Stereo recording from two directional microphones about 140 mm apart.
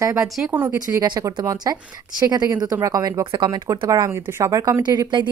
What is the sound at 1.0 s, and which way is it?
A woman's voice, 30° right (ahead or behind).